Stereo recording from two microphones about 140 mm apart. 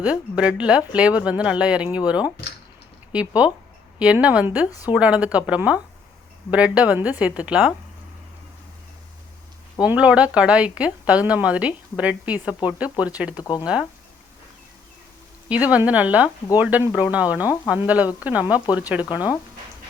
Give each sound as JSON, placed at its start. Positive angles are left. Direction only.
{"t": 0.0, "sound": "speech", "side_deg": -10}
{"t": 9.8, "sound": "speech", "side_deg": -10}
{"t": 13.4, "sound": "speech", "side_deg": 25}
{"t": 15.4, "sound": "speech", "side_deg": -10}